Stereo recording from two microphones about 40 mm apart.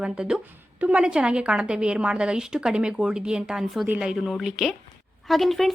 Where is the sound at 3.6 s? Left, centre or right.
Centre.